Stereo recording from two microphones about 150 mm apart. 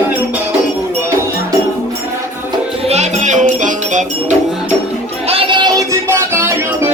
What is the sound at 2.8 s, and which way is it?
Music, 50° right (ahead or behind).